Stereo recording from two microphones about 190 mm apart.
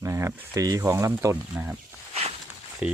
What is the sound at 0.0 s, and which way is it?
Speech, 15° right (ahead or behind).